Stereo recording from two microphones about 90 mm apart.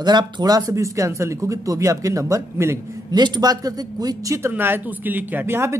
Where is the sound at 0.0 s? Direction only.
50° right (ahead or behind); by 2.8 s 35° right (ahead or behind).